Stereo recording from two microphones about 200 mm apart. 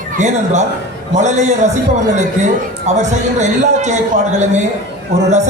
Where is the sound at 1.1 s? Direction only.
35° right (ahead or behind).